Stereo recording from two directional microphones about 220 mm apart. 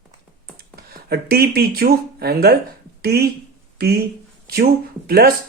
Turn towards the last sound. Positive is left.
turn(degrees=-45)  # may be behind; listen again after turning